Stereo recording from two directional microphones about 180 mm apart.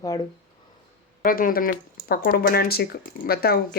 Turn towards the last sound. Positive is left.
turn(degrees=60)  # may be behind; listen again after turning